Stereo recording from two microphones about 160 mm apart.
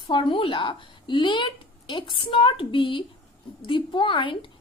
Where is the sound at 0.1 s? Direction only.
30° left (ahead or behind).